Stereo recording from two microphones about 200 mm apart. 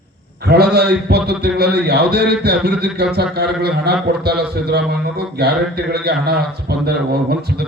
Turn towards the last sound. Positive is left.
turn(degrees=-50)  # may be behind; listen again after turning